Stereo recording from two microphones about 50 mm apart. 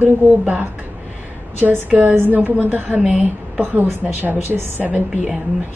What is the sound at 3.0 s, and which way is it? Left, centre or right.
Speech, right.